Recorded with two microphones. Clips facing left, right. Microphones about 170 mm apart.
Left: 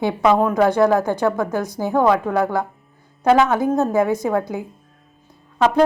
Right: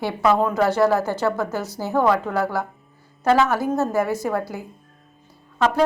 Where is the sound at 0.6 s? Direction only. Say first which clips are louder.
Left 3 dB; 5° right (ahead or behind).